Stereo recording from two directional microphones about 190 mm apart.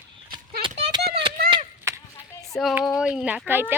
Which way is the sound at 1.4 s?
25° right (ahead or behind).